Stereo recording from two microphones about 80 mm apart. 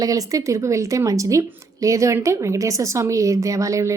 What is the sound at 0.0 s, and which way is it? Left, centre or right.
A woman's voice, right.